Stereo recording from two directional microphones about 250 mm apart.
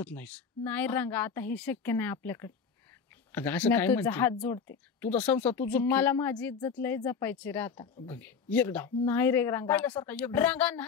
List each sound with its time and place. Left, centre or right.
0.0 s speech: centre
7.8 s speech: centre
8.1 s speech: centre